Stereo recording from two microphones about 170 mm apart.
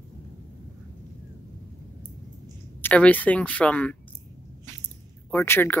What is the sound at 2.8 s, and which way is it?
Speech, 10° left (ahead or behind).